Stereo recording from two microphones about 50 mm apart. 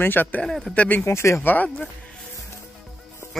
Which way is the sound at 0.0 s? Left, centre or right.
Left.